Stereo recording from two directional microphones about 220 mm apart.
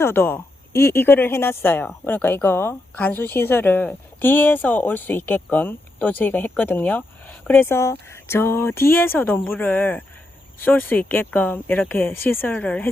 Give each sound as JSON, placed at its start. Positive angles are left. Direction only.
{"t": 0.0, "sound": "speech", "side_deg": 10}